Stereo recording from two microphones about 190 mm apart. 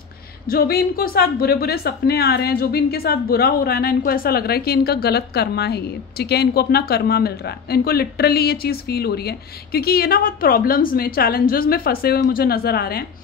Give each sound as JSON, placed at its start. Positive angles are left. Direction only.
{"t": 0.5, "sound": "a woman's voice", "side_deg": 55}